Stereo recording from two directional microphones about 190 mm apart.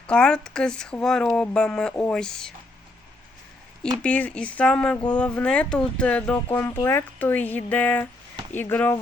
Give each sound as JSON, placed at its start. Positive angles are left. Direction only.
{"t": 0.1, "sound": "speech", "side_deg": 5}
{"t": 4.0, "sound": "speech", "side_deg": 5}